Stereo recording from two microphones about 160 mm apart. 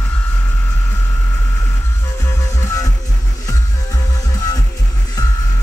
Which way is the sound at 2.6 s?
20° left (ahead or behind).